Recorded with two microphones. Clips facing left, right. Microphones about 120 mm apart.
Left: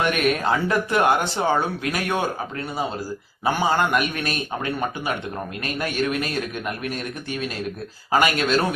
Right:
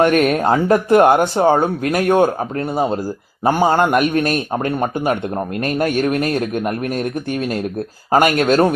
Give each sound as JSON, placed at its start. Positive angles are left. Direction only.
{"t": 0.0, "sound": "speech", "side_deg": -40}